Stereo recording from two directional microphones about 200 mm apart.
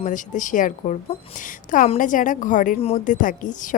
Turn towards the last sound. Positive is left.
turn(degrees=40)  # may be behind; listen again after turning